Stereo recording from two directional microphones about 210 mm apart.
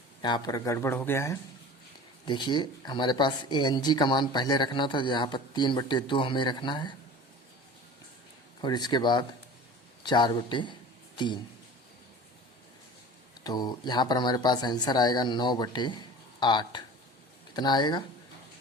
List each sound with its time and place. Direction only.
0.2 s speech: 20° left (ahead or behind)
8.6 s speech: 20° left (ahead or behind)
13.4 s speech: 20° left (ahead or behind)